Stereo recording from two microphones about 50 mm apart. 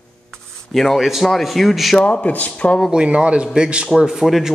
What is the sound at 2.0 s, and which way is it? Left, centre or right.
Speech, left.